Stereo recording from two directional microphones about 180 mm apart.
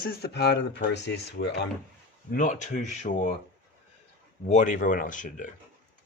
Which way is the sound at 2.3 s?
45° left (ahead or behind).